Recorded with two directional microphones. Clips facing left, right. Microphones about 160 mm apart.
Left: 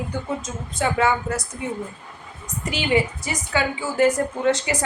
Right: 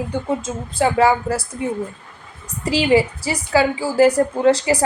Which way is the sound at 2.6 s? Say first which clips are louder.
Right 6 dB; 30° right (ahead or behind).